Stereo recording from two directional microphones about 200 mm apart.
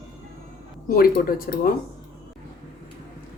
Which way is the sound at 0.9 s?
45° left (ahead or behind).